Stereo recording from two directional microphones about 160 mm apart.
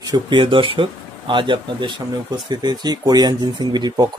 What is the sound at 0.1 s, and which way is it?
Speech, 30° right (ahead or behind).